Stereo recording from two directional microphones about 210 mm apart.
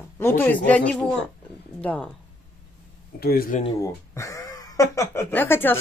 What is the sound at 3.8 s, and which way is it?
Speech, 15° left (ahead or behind).